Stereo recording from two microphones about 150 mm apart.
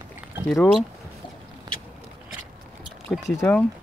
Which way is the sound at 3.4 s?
10° left (ahead or behind).